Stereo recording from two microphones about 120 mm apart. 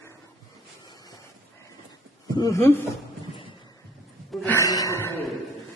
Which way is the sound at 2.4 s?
25° left (ahead or behind).